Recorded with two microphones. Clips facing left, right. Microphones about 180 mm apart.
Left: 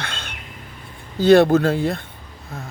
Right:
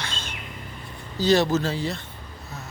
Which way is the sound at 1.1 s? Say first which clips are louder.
Left 8 dB; 55° left (ahead or behind).